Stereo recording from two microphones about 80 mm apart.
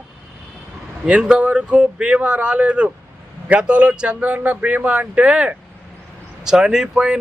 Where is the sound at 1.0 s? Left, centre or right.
Centre.